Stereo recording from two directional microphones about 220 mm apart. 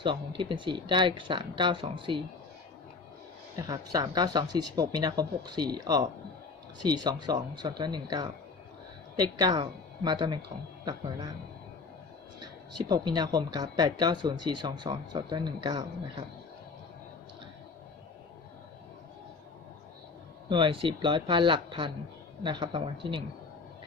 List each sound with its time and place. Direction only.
0.0 s speech: 20° right (ahead or behind)
3.7 s speech: 15° right (ahead or behind)
12.8 s speech: 20° right (ahead or behind)
20.5 s speech: 25° right (ahead or behind)